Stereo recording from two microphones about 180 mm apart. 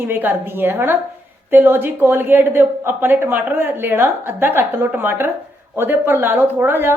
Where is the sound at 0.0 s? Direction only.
10° right (ahead or behind).